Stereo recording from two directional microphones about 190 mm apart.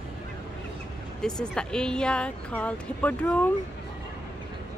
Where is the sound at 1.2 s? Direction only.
5° left (ahead or behind).